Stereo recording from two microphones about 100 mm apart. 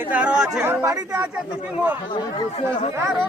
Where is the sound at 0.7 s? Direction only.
20° right (ahead or behind).